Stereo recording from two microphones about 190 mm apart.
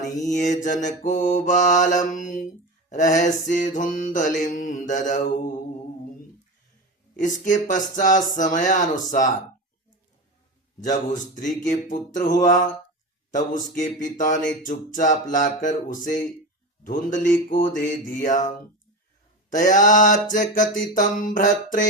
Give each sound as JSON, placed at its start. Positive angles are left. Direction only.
{"t": 0.0, "sound": "mantra", "side_deg": 40}
{"t": 7.2, "sound": "mantra", "side_deg": 40}
{"t": 10.8, "sound": "mantra", "side_deg": 40}